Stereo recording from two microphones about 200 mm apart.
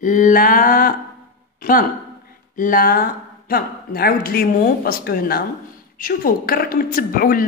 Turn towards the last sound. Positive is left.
turn(degrees=45)  # may be behind; listen again after turning